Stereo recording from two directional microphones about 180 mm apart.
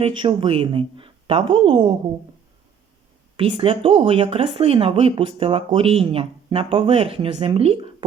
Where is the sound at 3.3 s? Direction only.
30° right (ahead or behind).